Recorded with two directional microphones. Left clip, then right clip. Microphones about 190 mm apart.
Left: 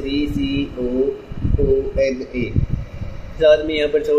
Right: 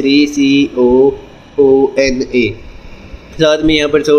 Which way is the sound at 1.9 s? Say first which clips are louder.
Right 7 dB; 40° right (ahead or behind).